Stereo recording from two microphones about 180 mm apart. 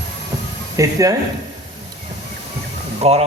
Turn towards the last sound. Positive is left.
turn(degrees=-35)  # may be behind; listen again after turning